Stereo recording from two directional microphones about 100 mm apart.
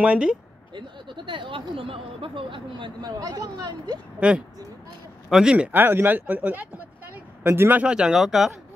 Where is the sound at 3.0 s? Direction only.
40° right (ahead or behind).